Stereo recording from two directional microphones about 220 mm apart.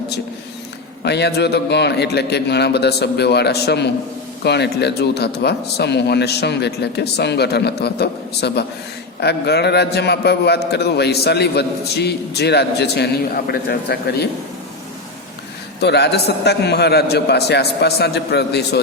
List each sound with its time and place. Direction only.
1.0 s a man's voice: 50° left (ahead or behind)
15.8 s a man's voice: 50° left (ahead or behind)